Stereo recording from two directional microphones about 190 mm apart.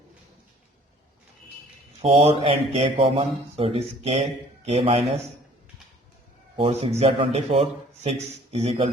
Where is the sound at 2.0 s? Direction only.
30° right (ahead or behind).